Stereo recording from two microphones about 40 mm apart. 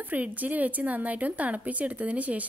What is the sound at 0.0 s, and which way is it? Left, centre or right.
A woman's voice, right.